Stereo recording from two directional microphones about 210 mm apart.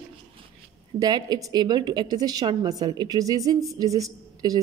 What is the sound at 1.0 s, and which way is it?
A woman's voice, 15° right (ahead or behind).